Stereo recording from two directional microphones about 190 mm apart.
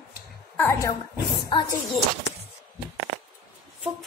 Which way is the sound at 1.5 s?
25° left (ahead or behind).